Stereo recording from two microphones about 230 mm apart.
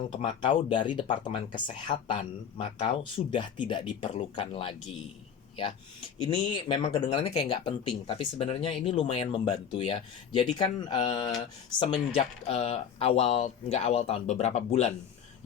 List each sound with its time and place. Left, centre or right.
0.1 s speech: left